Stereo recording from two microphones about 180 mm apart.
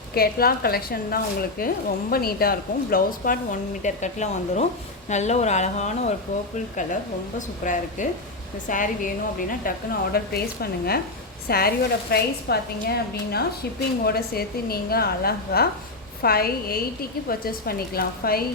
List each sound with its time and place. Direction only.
0.1 s speech: 55° left (ahead or behind)
3.8 s speech: 40° left (ahead or behind)
7.3 s a woman's voice: 45° left (ahead or behind)